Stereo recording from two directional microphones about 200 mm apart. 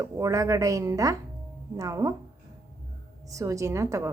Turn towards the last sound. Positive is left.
turn(degrees=-15)  # may be behind; listen again after turning